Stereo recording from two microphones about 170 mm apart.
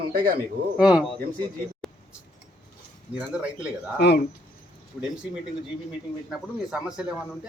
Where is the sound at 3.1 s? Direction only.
5° right (ahead or behind).